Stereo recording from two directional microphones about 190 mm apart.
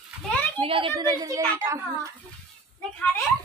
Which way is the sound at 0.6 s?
30° right (ahead or behind).